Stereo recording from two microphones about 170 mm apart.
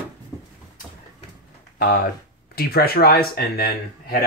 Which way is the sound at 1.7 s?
60° left (ahead or behind).